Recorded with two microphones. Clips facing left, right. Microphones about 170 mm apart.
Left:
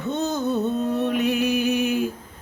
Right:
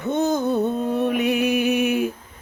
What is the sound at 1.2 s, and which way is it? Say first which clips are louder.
Speech: right 1 dB; 60° right (ahead or behind).